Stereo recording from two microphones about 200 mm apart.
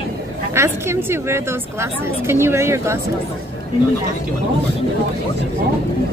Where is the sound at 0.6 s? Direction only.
15° right (ahead or behind).